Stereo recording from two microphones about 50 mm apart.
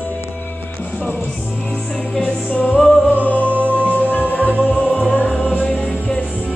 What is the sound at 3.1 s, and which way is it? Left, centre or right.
Music, left.